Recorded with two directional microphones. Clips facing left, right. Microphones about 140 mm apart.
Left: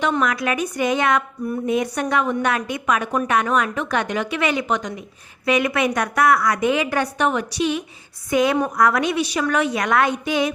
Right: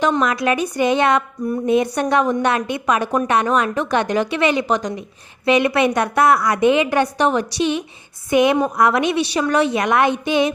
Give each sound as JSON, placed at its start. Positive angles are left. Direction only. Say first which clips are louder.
{"t": 0.0, "sound": "a woman's voice", "louder": "right 3 dB", "side_deg": -30}
{"t": 4.8, "sound": "a woman's voice", "louder": "right 4 dB", "side_deg": -40}